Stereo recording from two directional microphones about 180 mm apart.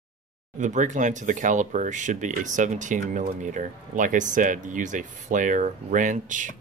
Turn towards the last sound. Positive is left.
turn(degrees=-45)  # may be behind; listen again after turning